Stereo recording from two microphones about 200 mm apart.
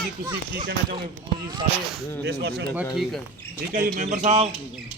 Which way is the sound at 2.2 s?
55° right (ahead or behind).